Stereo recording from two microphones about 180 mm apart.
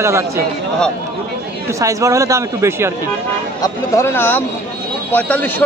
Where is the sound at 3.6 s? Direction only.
15° left (ahead or behind).